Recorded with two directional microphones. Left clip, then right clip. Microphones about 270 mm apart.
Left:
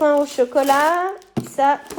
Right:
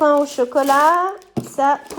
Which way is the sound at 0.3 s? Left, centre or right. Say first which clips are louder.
Right 1 dB; right.